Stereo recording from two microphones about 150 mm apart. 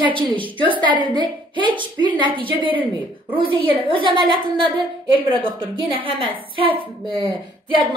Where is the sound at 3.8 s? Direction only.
35° right (ahead or behind).